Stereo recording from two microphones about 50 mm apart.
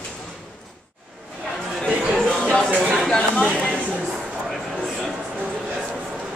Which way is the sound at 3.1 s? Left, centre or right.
Left.